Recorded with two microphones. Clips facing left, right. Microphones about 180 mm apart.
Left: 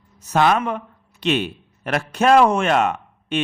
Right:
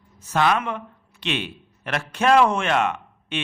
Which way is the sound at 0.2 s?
40° left (ahead or behind).